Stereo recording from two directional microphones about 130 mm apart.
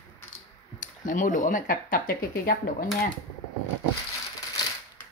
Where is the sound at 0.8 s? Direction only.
90° left.